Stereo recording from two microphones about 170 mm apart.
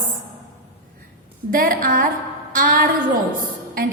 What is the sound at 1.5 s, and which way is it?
A woman's voice, 55° right (ahead or behind).